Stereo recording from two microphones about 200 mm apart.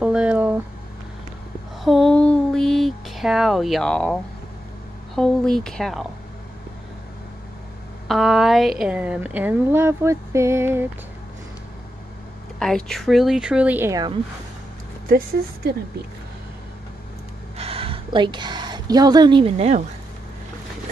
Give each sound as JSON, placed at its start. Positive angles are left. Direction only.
{"t": 0.0, "sound": "a sound", "side_deg": -5}
{"t": 1.9, "sound": "a sound", "side_deg": 5}
{"t": 5.1, "sound": "speech", "side_deg": 0}
{"t": 8.1, "sound": "speech", "side_deg": 0}
{"t": 12.5, "sound": "speech", "side_deg": 5}
{"t": 15.0, "sound": "a woman's voice", "side_deg": -45}
{"t": 17.6, "sound": "a woman's voice", "side_deg": -30}